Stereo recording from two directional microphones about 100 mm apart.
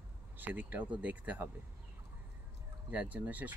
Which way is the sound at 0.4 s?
15° right (ahead or behind).